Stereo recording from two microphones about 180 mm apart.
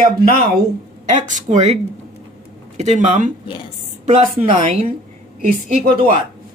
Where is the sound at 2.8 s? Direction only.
40° right (ahead or behind).